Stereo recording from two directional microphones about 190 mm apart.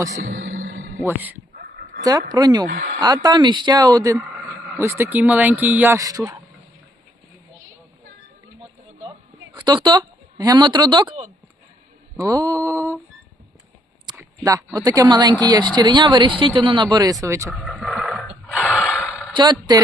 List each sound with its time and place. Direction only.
0.2 s music: 45° right (ahead or behind)
0.4 s music: 90° right
1.0 s speech: 10° right (ahead or behind)
2.6 s speech: 70° right (ahead or behind)
3.0 s speech: 20° right (ahead or behind)
9.6 s speech: 25° right (ahead or behind)
12.2 s speech: 20° right (ahead or behind)
14.2 s speech: 20° right (ahead or behind)
17.5 s a sound: centre (ahead or behind)
19.3 s speech: 25° right (ahead or behind)